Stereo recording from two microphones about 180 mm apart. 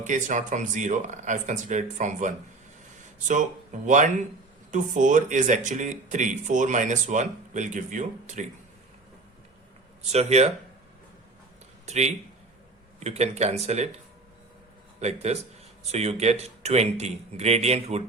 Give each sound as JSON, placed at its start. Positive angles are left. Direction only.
{"t": 0.0, "sound": "speech", "side_deg": -45}
{"t": 10.1, "sound": "speech", "side_deg": -35}
{"t": 11.9, "sound": "speech", "side_deg": -40}
{"t": 14.9, "sound": "a man's voice", "side_deg": -35}